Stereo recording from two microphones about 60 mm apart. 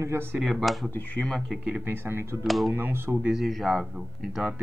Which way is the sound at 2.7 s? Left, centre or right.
Right.